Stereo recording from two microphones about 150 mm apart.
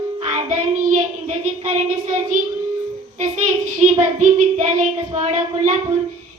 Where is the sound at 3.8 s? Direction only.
55° right (ahead or behind).